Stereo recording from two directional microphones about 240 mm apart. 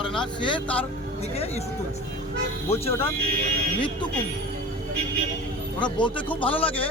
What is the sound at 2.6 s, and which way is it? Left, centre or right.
A man's voice, left.